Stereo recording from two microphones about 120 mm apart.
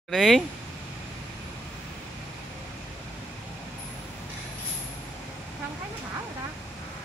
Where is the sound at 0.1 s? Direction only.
Centre (ahead or behind).